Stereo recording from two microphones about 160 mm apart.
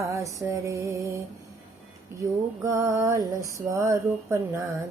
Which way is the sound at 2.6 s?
20° right (ahead or behind).